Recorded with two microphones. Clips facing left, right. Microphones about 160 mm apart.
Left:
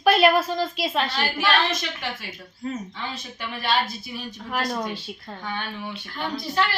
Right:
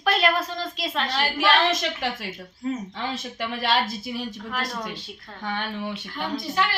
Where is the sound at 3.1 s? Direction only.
90° right.